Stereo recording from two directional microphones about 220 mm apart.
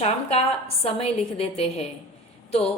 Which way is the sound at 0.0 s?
30° left (ahead or behind).